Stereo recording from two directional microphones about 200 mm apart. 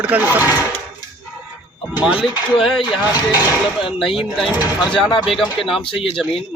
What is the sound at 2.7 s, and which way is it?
Speech, centre (ahead or behind).